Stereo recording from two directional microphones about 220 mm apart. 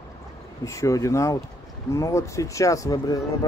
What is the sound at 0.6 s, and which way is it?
Speech, 15° left (ahead or behind).